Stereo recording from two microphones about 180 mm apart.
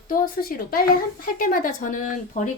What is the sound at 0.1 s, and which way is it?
A woman's voice, 55° left (ahead or behind).